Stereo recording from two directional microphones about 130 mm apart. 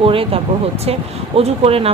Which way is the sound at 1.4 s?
50° right (ahead or behind).